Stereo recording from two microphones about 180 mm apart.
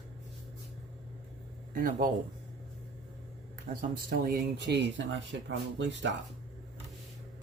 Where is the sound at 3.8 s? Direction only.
55° right (ahead or behind); by 6.1 s 85° right.